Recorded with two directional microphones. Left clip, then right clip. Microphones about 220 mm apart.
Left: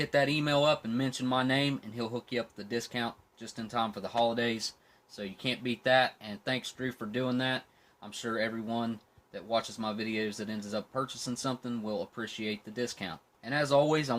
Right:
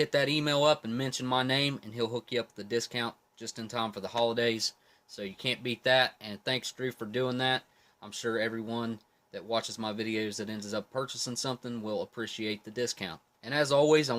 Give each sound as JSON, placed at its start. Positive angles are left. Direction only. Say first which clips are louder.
{"t": 0.0, "sound": "speech", "louder": "right 1 dB", "side_deg": -45}